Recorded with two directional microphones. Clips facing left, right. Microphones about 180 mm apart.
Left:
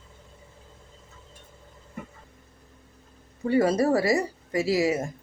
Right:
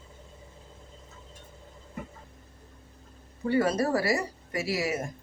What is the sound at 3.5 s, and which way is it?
Speech, 25° left (ahead or behind).